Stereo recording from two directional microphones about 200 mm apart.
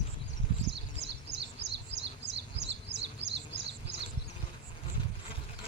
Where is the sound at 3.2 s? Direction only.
60° right (ahead or behind).